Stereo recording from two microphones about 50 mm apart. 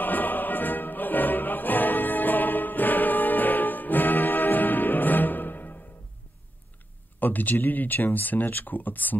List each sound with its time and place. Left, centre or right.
0.0 s music: left
7.2 s speech: left